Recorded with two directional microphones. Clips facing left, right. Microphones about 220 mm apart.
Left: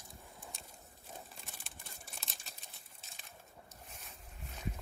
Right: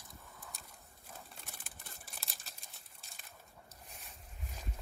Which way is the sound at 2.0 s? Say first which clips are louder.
Left 2 dB; centre (ahead or behind).